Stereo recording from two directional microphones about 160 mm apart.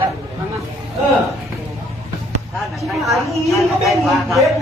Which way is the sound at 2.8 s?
Centre (ahead or behind).